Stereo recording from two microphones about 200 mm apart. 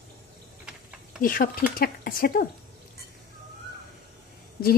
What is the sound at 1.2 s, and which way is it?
Speech, 45° left (ahead or behind).